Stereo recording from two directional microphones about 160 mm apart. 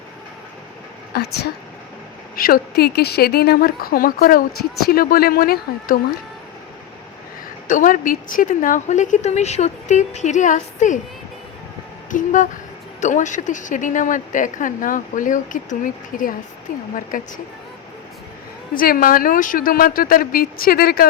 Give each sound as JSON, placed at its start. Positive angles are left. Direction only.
{"t": 1.1, "sound": "a woman's voice", "side_deg": 85}
{"t": 2.3, "sound": "a woman's voice", "side_deg": 65}
{"t": 7.7, "sound": "a woman's voice", "side_deg": 55}
{"t": 12.1, "sound": "a woman's voice", "side_deg": 50}
{"t": 18.7, "sound": "a woman's voice", "side_deg": 60}